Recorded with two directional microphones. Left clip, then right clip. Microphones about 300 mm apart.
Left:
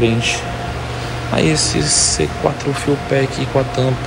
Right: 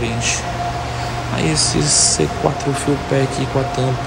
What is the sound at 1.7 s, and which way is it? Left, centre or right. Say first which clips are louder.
Speech: even; centre.